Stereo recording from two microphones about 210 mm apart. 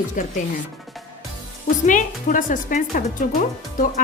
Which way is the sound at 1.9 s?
40° left (ahead or behind).